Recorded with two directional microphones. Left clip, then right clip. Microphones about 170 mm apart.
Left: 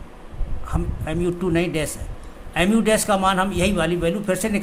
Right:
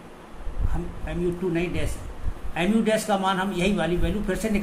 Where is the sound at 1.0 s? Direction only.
55° left (ahead or behind).